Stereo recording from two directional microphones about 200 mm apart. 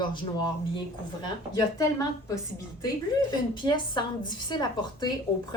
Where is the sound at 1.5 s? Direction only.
15° left (ahead or behind).